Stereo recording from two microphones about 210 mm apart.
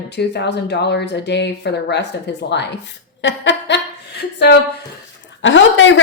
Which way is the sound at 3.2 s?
60° left (ahead or behind).